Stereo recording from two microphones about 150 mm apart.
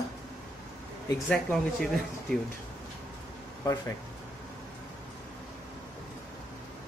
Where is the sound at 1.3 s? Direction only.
5° left (ahead or behind).